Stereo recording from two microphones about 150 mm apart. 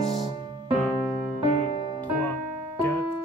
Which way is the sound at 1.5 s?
60° left (ahead or behind).